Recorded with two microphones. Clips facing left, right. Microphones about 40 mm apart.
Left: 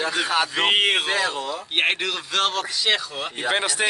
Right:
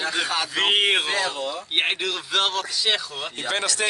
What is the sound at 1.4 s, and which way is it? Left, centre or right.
Speech, centre.